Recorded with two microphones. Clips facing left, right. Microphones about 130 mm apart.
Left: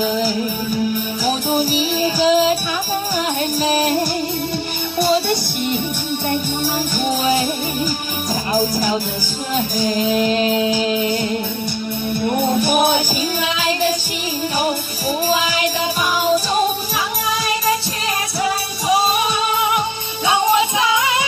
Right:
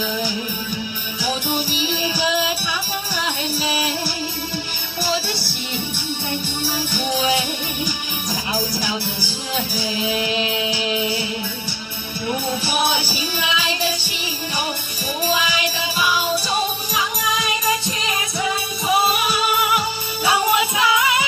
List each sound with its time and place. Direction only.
0.0 s music: 40° left (ahead or behind)
3.5 s music: 45° left (ahead or behind)
5.0 s music: 55° left (ahead or behind)
7.2 s music: 40° left (ahead or behind)
9.8 s music: 45° left (ahead or behind)
15.2 s music: 40° left (ahead or behind)
18.4 s music: 30° left (ahead or behind)